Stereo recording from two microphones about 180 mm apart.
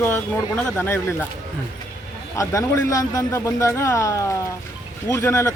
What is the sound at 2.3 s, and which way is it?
A man's voice, 20° left (ahead or behind).